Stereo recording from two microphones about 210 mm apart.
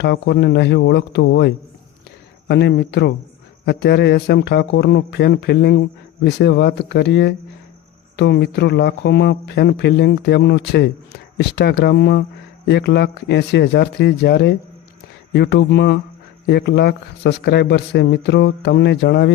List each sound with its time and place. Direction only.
0.0 s speech: 55° left (ahead or behind)